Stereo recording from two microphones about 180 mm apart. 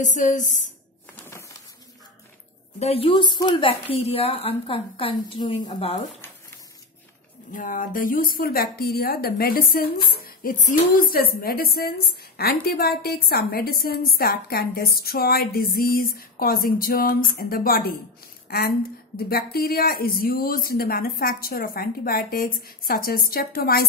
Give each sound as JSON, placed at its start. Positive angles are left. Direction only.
{"t": 0.0, "sound": "a woman's voice", "side_deg": 45}
{"t": 1.2, "sound": "bird", "side_deg": 15}
{"t": 2.8, "sound": "a woman's voice", "side_deg": 30}
{"t": 7.5, "sound": "a woman's voice", "side_deg": 50}